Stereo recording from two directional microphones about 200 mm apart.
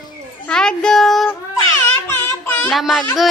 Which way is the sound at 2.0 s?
10° left (ahead or behind).